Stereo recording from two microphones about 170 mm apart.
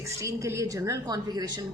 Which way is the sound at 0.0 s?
15° right (ahead or behind).